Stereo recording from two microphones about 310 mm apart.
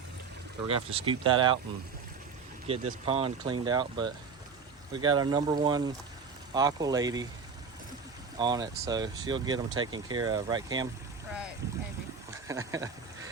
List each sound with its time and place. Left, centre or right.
0.7 s speech: centre
2.6 s speech: centre
8.4 s speech: centre
12.5 s speech: centre